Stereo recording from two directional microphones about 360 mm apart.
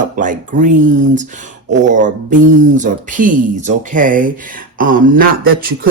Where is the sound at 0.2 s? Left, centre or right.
Right.